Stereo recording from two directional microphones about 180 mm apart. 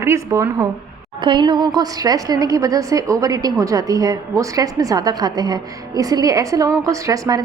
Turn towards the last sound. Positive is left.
turn(degrees=-20)  # may be behind; listen again after turning